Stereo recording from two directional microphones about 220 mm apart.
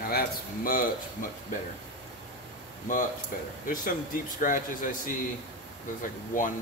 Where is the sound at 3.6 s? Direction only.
40° left (ahead or behind).